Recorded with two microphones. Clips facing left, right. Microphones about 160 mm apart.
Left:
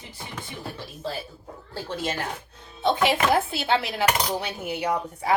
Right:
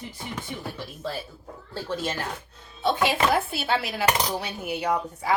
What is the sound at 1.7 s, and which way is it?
Speech, 15° left (ahead or behind).